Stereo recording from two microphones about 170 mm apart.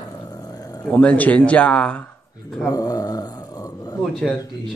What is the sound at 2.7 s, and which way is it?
Speech, 20° left (ahead or behind).